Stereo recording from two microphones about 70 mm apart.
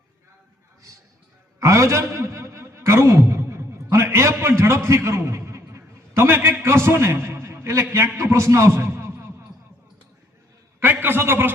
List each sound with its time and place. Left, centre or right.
1.5 s a sound: right
6.7 s a man's voice: right
11.0 s a man's voice: right